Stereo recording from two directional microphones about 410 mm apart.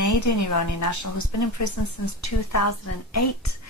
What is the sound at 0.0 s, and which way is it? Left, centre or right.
A woman's voice, left.